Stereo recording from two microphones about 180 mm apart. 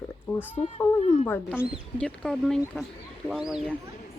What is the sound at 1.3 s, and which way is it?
Speech, 10° left (ahead or behind).